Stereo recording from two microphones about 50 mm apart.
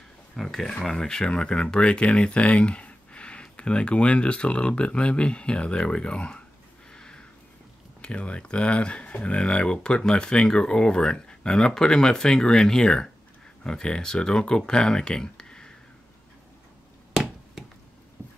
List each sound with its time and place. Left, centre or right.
0.4 s speech: centre
6.9 s a sound: centre
8.0 s speech: left